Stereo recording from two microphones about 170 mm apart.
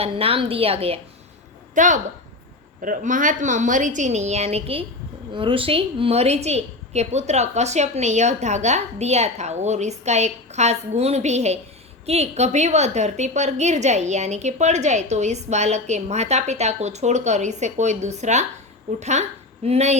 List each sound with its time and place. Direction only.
0.0 s a woman's voice: 35° right (ahead or behind)
1.7 s a woman's voice: 50° right (ahead or behind)